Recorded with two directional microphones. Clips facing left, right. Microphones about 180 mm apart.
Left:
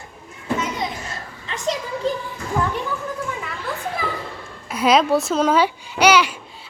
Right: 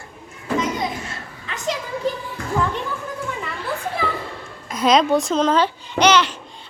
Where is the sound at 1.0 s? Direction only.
35° left (ahead or behind).